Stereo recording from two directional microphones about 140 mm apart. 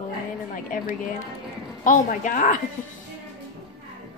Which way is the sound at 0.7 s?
80° left.